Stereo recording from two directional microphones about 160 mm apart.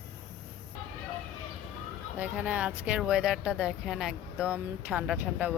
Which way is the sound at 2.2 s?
10° right (ahead or behind).